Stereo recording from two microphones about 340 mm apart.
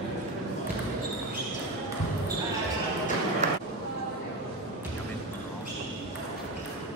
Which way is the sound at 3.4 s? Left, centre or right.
Centre.